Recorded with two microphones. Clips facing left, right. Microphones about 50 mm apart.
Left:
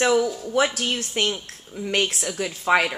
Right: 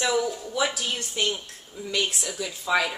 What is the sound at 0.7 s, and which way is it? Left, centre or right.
A woman's voice, left.